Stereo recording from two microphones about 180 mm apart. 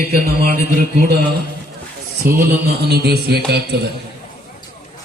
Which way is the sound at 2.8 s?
65° right (ahead or behind).